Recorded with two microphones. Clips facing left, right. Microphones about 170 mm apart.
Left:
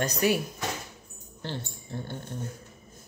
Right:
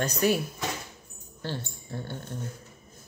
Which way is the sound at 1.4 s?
20° left (ahead or behind).